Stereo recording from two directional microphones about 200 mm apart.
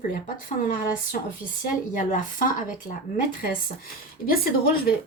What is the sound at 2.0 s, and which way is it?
Speech, 40° left (ahead or behind).